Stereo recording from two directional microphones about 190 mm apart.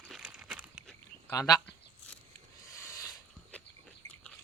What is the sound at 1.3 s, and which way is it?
Speech, 20° left (ahead or behind).